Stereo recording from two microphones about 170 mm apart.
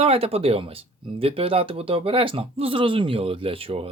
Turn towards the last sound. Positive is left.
turn(degrees=-35)  # may be behind; listen again after turning